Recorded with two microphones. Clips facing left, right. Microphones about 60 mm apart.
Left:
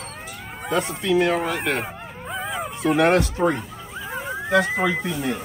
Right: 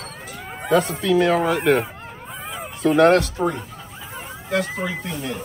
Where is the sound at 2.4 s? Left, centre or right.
Centre.